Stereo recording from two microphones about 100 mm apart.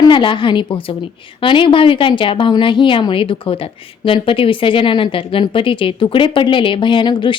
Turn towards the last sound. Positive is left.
turn(degrees=50)  # may be behind; listen again after turning